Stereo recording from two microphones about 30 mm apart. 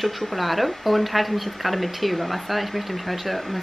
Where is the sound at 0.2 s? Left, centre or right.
Centre.